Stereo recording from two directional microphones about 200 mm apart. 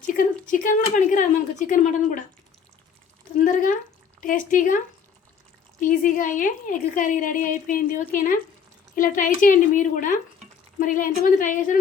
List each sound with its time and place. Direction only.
0.1 s a woman's voice: 40° left (ahead or behind)
3.4 s a woman's voice: 40° left (ahead or behind)
6.0 s a woman's voice: 40° left (ahead or behind)